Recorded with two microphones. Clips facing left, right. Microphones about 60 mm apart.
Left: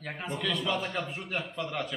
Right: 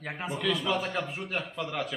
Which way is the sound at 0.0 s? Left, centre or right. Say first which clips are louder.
Right 2 dB; centre.